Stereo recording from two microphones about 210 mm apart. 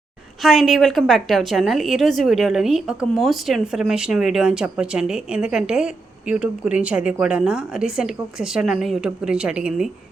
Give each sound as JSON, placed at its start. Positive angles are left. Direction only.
{"t": 0.4, "sound": "a woman's voice", "side_deg": 0}